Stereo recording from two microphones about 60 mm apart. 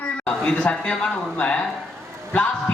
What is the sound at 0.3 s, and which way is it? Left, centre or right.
A man's voice, centre.